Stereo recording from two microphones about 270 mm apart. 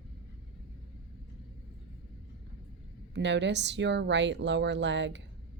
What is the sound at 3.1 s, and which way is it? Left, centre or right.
A woman's voice, right.